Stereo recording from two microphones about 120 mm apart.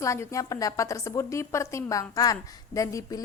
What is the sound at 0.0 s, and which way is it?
A woman's voice, 25° left (ahead or behind).